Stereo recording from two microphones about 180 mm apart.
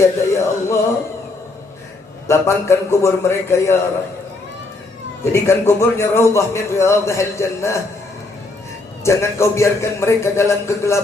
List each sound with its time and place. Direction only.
0.0 s male singing: 15° left (ahead or behind)
2.2 s a man's voice: 15° left (ahead or behind)
5.3 s a man's voice: 15° left (ahead or behind)
9.0 s a man's voice: 15° left (ahead or behind)